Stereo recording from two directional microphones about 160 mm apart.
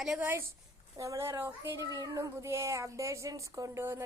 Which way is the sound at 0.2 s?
15° right (ahead or behind).